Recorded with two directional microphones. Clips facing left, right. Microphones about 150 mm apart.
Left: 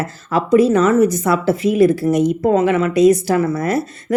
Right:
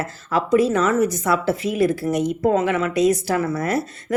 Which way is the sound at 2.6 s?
30° left (ahead or behind).